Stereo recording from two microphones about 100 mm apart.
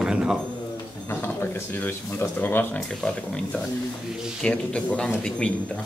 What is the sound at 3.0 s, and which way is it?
A man's voice, 5° left (ahead or behind).